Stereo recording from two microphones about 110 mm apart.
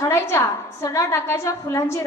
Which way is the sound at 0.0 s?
25° left (ahead or behind).